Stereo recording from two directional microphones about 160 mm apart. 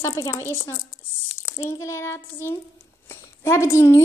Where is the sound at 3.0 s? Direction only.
15° left (ahead or behind).